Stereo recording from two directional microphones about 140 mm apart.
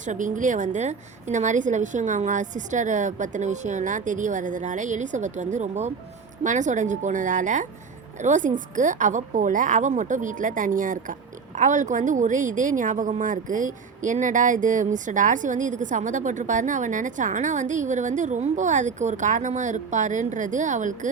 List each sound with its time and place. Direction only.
0.0 s a woman's voice: 65° right (ahead or behind)